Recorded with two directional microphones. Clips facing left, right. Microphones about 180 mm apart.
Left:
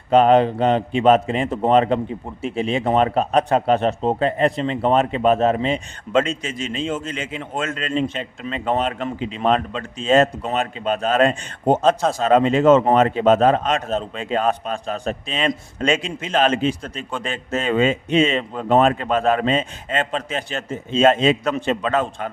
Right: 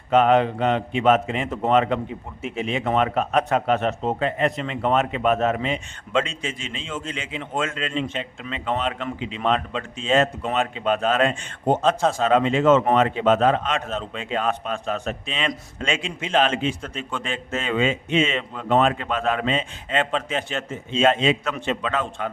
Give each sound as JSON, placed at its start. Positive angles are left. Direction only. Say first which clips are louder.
{"t": 0.1, "sound": "speech", "louder": "left 3 dB", "side_deg": 35}